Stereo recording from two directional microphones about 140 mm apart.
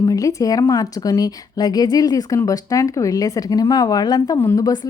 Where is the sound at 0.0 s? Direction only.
25° left (ahead or behind).